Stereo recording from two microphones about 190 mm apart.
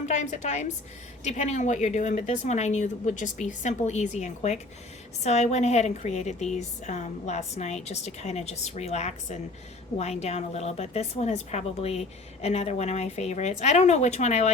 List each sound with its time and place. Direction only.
0.0 s speech: 40° left (ahead or behind)